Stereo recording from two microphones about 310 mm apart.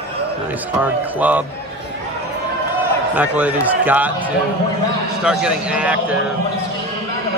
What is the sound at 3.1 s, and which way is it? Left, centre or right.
Speech, centre.